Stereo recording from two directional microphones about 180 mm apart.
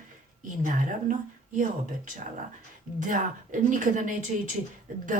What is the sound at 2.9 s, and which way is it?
Speech, 45° right (ahead or behind).